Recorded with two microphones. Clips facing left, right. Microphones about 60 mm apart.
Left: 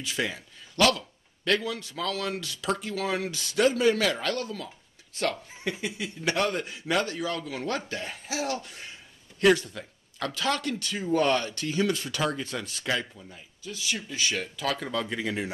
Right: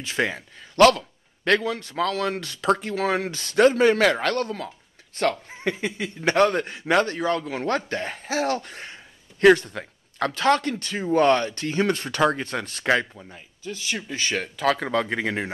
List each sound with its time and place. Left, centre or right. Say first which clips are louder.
0.0 s speech: right 5 dB; right